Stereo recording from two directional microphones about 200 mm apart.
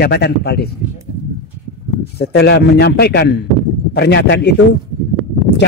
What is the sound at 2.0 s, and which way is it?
Speech, 55° left (ahead or behind).